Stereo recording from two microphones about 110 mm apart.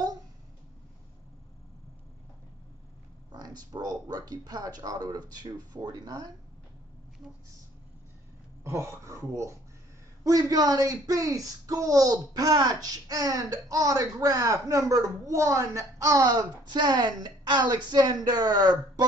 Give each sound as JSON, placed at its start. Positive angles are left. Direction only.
{"t": 3.3, "sound": "speech", "side_deg": -35}
{"t": 8.6, "sound": "speech", "side_deg": -25}